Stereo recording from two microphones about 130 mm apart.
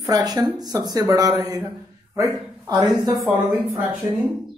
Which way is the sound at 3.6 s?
15° right (ahead or behind).